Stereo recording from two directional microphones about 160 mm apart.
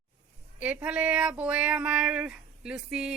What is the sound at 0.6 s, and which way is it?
A woman's voice, 10° right (ahead or behind).